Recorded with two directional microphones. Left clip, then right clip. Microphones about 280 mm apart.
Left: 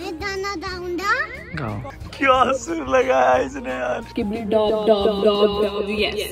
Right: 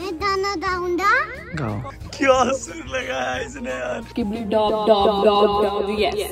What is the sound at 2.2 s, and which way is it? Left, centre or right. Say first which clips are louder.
Speech: left 1 dB; centre.